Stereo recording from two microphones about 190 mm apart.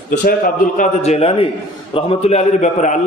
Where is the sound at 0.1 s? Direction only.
50° left (ahead or behind).